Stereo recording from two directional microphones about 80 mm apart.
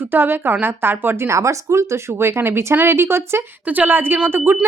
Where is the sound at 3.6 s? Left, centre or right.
Right.